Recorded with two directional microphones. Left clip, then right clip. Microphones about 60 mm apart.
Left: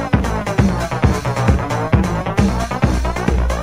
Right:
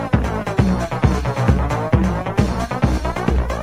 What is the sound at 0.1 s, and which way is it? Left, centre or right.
Music, left.